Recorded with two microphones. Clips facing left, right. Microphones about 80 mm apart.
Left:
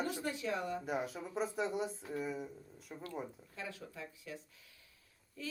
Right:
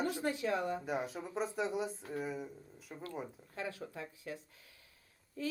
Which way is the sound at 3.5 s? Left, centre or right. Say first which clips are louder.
Right 5 dB; right.